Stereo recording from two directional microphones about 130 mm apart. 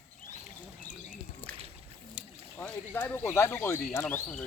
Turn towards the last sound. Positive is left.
turn(degrees=15)  # may be behind; listen again after turning